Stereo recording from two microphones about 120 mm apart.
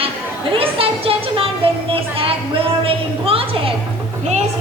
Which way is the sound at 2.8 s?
50° right (ahead or behind).